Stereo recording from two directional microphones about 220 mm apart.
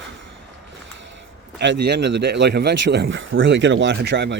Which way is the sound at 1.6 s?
50° right (ahead or behind).